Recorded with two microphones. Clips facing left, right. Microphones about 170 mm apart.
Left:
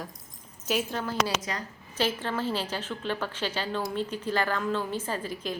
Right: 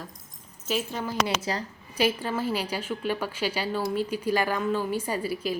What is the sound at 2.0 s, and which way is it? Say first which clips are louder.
A woman's voice: right 3 dB; 10° right (ahead or behind).